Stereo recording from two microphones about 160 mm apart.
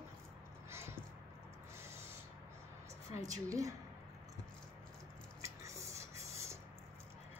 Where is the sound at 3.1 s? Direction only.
20° right (ahead or behind).